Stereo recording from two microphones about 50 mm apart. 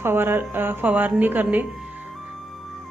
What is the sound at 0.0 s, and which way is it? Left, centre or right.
Speech, right.